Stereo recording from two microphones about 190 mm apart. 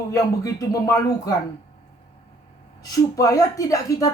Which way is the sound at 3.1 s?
20° left (ahead or behind).